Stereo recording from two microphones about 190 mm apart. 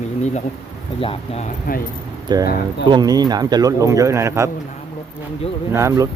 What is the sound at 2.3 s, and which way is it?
Speech, 20° right (ahead or behind).